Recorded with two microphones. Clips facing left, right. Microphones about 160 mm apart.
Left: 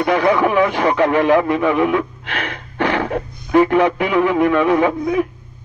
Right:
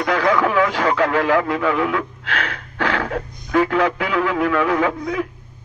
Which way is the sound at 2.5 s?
20° left (ahead or behind).